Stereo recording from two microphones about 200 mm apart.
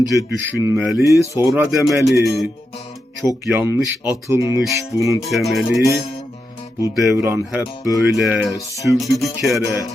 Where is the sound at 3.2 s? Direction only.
10° right (ahead or behind).